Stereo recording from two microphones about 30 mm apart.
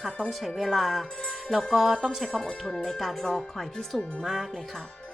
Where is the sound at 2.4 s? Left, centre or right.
Left.